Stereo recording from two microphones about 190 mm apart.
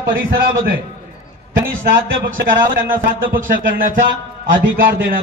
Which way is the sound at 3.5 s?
45° right (ahead or behind).